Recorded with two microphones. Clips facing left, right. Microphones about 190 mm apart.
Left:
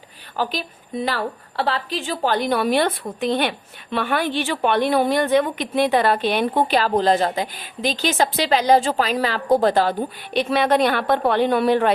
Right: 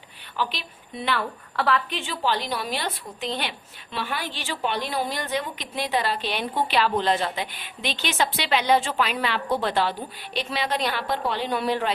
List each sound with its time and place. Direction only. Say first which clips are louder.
0.3 s a woman's voice: left 5 dB; 40° left (ahead or behind)